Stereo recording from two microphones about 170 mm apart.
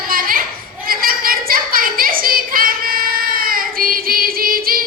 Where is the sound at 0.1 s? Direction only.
55° right (ahead or behind).